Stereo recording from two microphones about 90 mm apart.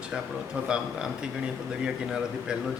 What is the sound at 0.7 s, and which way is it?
A man's voice, 10° right (ahead or behind).